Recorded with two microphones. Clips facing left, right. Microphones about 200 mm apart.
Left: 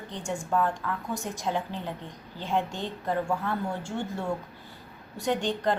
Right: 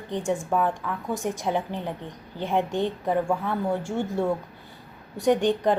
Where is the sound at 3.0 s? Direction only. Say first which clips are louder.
Right 4 dB; 15° right (ahead or behind).